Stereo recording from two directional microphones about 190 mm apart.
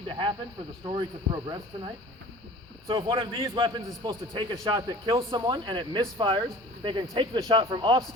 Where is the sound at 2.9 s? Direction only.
25° right (ahead or behind).